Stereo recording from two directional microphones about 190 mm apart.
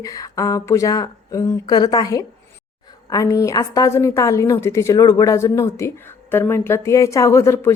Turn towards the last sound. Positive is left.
turn(degrees=15)  # may be behind; listen again after turning